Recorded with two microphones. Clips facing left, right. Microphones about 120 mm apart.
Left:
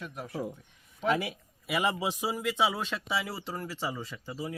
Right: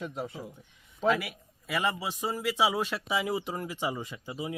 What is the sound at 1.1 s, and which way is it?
A man's voice, 20° left (ahead or behind).